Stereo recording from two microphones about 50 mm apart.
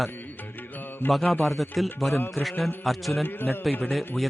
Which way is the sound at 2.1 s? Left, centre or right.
Left.